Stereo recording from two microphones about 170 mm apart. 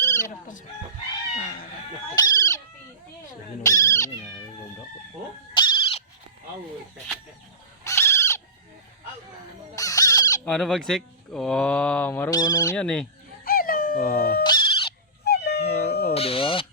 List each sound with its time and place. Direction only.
0.0 s chicken: 15° left (ahead or behind)
2.1 s bird: 20° left (ahead or behind)
3.6 s cat: 20° left (ahead or behind)
5.5 s owl: 30° left (ahead or behind)
7.9 s owl: 15° left (ahead or behind)
9.7 s chicken: 20° left (ahead or behind)
10.4 s speech: 5° left (ahead or behind)
12.3 s bird: 20° left (ahead or behind)
12.7 s speech: 5° left (ahead or behind)
13.4 s dog: 60° left (ahead or behind)
14.4 s music: 25° left (ahead or behind)
15.2 s howl: 75° left (ahead or behind)
16.1 s a sound: 35° left (ahead or behind)